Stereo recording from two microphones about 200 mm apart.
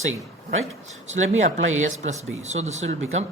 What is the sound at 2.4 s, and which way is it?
Speech, 35° right (ahead or behind).